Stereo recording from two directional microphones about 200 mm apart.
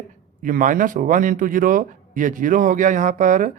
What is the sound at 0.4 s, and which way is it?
Speech, 40° right (ahead or behind).